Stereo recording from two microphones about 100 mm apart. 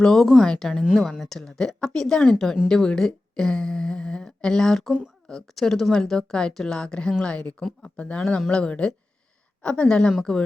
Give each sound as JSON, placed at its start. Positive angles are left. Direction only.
{"t": 0.0, "sound": "a woman's voice", "side_deg": 5}